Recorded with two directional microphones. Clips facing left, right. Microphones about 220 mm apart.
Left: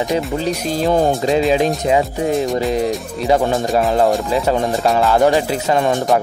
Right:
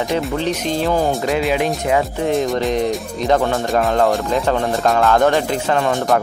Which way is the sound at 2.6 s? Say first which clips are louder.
Even; 5° left (ahead or behind).